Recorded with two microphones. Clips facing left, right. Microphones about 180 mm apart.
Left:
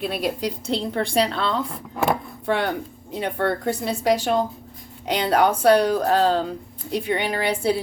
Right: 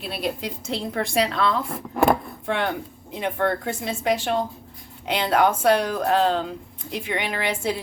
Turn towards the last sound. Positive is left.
turn(degrees=35)  # may be behind; listen again after turning